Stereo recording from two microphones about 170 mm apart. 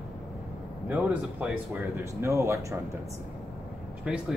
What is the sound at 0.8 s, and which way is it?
Speech, 10° right (ahead or behind).